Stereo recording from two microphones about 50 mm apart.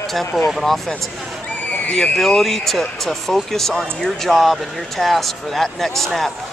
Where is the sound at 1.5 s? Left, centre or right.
Left.